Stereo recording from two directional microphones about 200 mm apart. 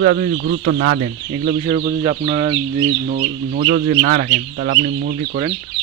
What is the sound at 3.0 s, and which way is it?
Speech, 50° right (ahead or behind).